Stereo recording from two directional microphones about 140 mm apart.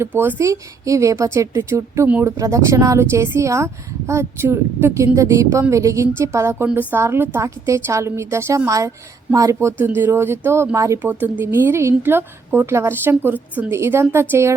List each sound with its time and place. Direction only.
0.2 s a woman's voice: 20° right (ahead or behind)